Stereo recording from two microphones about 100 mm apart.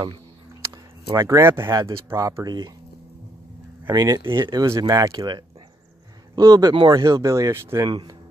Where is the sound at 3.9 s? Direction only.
35° right (ahead or behind).